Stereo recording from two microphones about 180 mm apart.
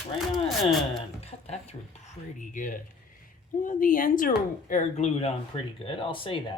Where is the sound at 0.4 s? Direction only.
Centre (ahead or behind).